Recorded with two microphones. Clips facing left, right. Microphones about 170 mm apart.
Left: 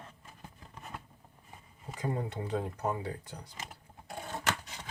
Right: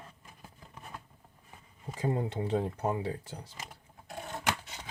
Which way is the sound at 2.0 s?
25° right (ahead or behind).